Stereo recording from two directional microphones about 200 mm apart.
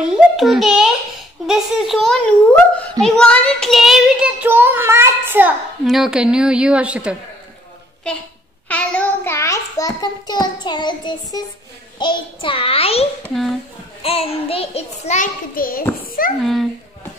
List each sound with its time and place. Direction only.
0.1 s a child's voice: centre (ahead or behind)
8.6 s a child's voice: 5° left (ahead or behind); by 13.1 s 30° left (ahead or behind)
13.3 s a child's voice: centre (ahead or behind)
14.0 s a child's voice: 30° left (ahead or behind); by 16.3 s 45° left (ahead or behind)
16.3 s a child's voice: centre (ahead or behind)